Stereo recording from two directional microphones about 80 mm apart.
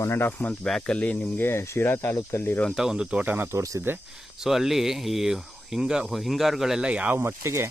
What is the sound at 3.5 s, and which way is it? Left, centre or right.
Speech, right.